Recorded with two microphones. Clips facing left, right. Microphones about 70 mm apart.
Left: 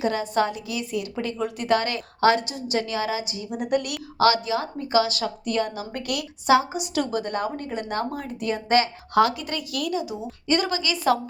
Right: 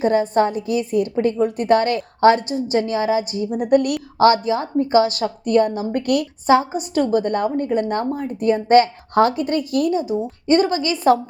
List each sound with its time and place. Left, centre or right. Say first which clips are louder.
0.0 s a woman's voice: right 6 dB; right